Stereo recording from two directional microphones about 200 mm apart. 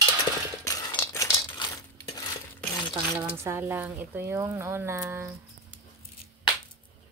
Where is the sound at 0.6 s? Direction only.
15° left (ahead or behind).